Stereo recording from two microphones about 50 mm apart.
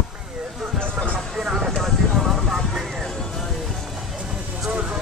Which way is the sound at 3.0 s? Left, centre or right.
Centre.